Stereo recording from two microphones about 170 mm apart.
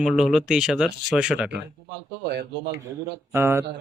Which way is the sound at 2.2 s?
80° right.